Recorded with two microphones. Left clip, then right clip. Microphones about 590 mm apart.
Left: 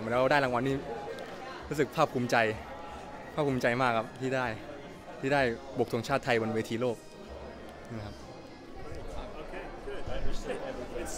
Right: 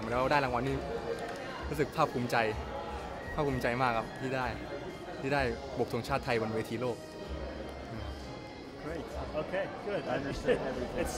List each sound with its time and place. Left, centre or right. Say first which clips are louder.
0.1 s speech: left 3 dB; left
1.8 s speech: left 3 dB; left